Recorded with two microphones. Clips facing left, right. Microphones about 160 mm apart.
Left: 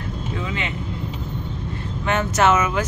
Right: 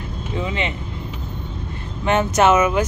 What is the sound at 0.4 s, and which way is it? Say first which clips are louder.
Speech: right 6 dB; 20° right (ahead or behind).